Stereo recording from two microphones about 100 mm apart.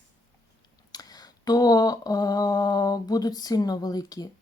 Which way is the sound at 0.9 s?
40° left (ahead or behind).